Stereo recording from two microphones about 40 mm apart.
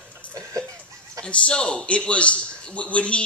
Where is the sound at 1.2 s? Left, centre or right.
Left.